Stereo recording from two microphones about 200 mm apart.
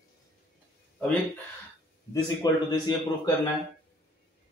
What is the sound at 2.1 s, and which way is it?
A man's voice, 20° left (ahead or behind).